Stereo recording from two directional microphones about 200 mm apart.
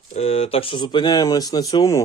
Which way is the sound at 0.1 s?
30° left (ahead or behind).